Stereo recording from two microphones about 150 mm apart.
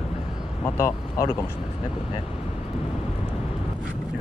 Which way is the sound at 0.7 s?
20° left (ahead or behind).